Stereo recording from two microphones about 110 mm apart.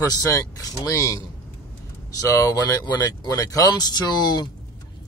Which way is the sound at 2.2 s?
30° left (ahead or behind).